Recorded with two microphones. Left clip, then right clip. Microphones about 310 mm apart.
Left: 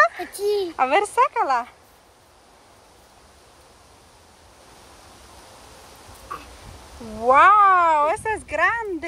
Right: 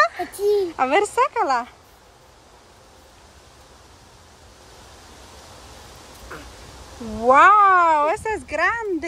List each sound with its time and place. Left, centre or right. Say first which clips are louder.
0.0 s a sound: left 1 dB; centre
0.7 s speech: even; centre
7.2 s speech: right 1 dB; centre